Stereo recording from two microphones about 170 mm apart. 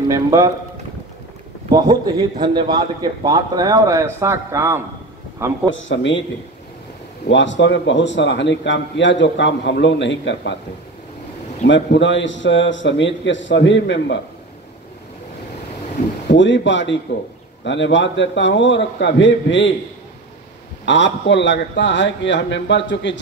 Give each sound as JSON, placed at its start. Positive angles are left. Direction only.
{"t": 0.1, "sound": "a man's voice", "side_deg": -20}
{"t": 1.7, "sound": "a man's voice", "side_deg": -25}
{"t": 5.8, "sound": "a man's voice", "side_deg": 90}
{"t": 7.2, "sound": "a man's voice", "side_deg": 90}
{"t": 11.6, "sound": "a man's voice", "side_deg": 90}
{"t": 16.3, "sound": "a man's voice", "side_deg": 90}
{"t": 20.8, "sound": "a man's voice", "side_deg": 90}